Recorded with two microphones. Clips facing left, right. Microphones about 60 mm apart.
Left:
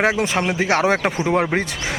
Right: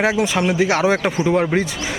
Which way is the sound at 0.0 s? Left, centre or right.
Left.